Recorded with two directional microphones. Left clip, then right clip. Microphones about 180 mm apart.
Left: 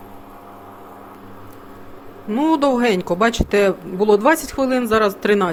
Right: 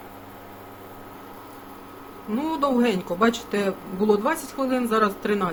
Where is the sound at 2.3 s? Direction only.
45° left (ahead or behind).